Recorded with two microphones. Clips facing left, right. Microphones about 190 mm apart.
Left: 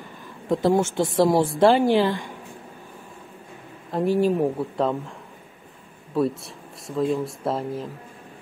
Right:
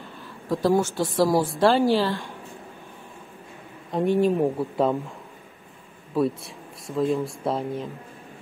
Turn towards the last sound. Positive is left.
turn(degrees=0)  # may be behind; listen again after turning